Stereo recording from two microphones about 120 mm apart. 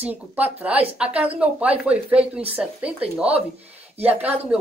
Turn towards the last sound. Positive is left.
turn(degrees=-15)  # may be behind; listen again after turning